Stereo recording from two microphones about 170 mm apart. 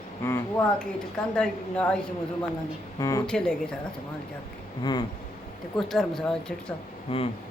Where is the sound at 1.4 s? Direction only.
5° left (ahead or behind).